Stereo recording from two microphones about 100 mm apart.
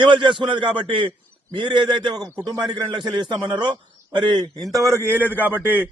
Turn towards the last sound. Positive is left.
turn(degrees=-15)  # may be behind; listen again after turning